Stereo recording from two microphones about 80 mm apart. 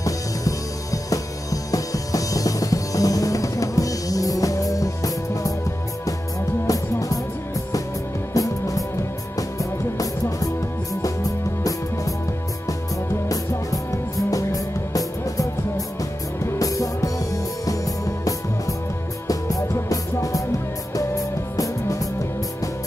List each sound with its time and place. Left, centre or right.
0.0 s music: left
6.7 s music: left
8.3 s music: left
14.3 s music: left
16.5 s music: left